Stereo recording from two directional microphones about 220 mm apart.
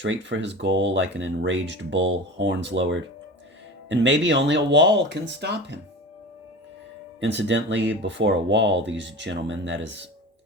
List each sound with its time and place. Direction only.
0.0 s speech: 55° right (ahead or behind)
7.2 s speech: 55° right (ahead or behind)